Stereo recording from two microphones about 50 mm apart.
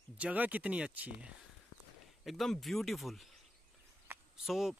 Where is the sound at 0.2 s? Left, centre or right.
Right.